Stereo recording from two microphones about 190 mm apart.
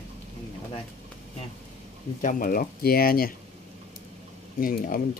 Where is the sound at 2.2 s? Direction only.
45° left (ahead or behind).